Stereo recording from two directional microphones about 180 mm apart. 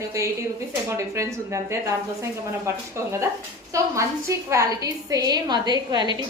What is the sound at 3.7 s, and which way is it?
A woman's voice, 15° right (ahead or behind).